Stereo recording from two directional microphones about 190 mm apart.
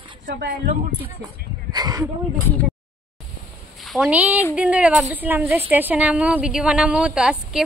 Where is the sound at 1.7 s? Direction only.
20° right (ahead or behind).